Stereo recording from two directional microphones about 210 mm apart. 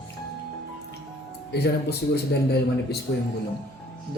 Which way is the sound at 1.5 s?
50° left (ahead or behind).